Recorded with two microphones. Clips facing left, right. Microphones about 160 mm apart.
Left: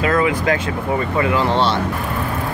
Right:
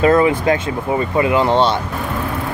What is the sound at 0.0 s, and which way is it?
Speech, 30° right (ahead or behind).